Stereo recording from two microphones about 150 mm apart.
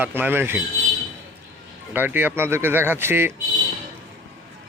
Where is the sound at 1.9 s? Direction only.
10° right (ahead or behind).